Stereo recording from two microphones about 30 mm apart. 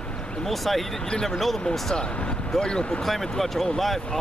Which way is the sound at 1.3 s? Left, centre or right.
Centre.